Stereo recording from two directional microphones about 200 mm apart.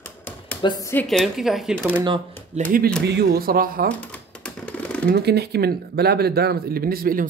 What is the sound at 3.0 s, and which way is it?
Speech, 55° right (ahead or behind).